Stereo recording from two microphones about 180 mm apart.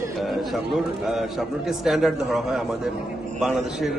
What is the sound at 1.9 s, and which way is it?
Speech, centre (ahead or behind).